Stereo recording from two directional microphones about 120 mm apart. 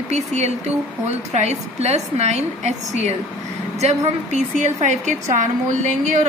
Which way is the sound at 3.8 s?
70° right (ahead or behind).